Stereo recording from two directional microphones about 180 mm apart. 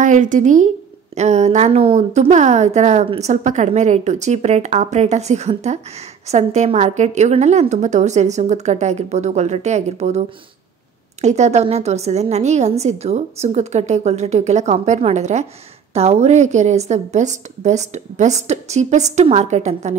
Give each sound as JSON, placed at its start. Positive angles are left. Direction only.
{"t": 0.0, "sound": "a woman's voice", "side_deg": -45}